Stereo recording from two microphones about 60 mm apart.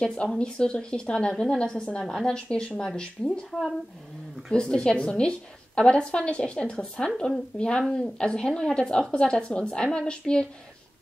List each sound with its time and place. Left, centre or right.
0.0 s a woman's voice: centre
4.5 s a woman's voice: centre